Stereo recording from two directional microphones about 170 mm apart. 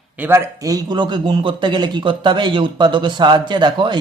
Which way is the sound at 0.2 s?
15° right (ahead or behind).